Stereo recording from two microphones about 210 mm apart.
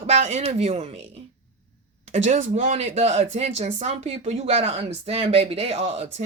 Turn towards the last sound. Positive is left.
turn(degrees=-30)  # may be behind; listen again after turning